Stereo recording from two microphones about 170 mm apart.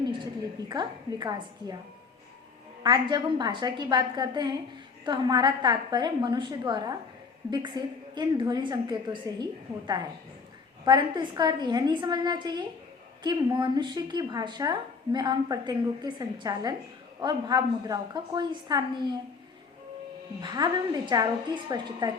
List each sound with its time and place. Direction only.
0.7 s speech: 25° right (ahead or behind)
2.8 s speech: 25° right (ahead or behind)
20.4 s speech: 25° right (ahead or behind)